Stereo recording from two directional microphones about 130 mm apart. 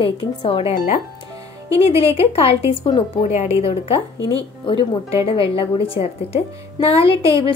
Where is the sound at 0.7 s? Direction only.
70° left (ahead or behind).